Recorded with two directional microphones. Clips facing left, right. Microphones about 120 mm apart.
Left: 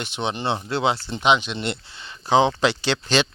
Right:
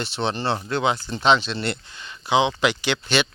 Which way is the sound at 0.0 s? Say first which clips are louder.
Right 1 dB; 15° left (ahead or behind).